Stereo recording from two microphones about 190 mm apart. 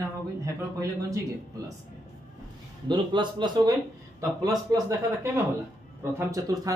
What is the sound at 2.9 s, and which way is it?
A man's voice, 25° right (ahead or behind).